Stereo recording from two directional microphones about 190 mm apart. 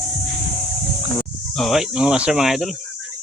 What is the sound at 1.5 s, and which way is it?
Speech, centre (ahead or behind).